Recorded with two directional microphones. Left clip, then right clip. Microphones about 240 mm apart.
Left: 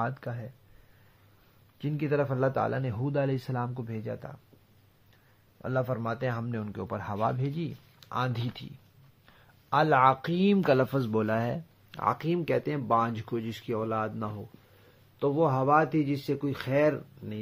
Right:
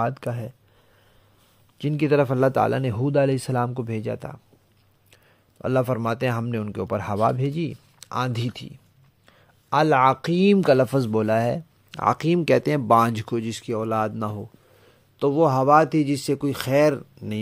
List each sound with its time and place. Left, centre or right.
0.0 s a man's voice: right
1.8 s a man's voice: right